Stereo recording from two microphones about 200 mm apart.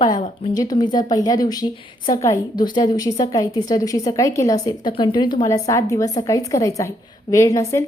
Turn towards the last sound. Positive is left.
turn(degrees=15)  # may be behind; listen again after turning